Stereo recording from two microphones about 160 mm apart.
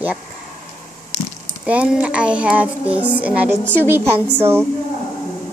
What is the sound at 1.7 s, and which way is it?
Child singing, 10° right (ahead or behind).